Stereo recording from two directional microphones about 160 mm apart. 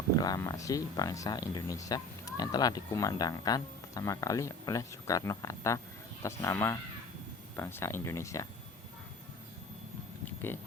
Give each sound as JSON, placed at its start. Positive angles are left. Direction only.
{"t": 0.2, "sound": "speech", "side_deg": 20}